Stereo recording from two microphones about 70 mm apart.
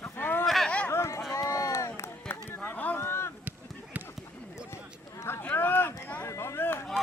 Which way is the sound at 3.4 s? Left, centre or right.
Right.